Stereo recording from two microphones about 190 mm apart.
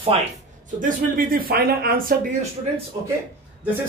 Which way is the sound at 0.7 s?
45° right (ahead or behind).